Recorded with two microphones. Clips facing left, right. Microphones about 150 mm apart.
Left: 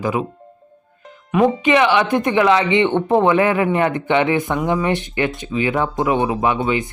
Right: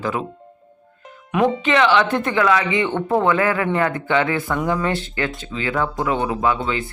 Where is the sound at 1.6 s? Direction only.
15° left (ahead or behind).